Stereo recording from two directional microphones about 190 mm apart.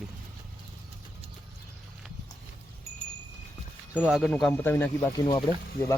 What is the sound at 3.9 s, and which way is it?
Chime, 5° right (ahead or behind).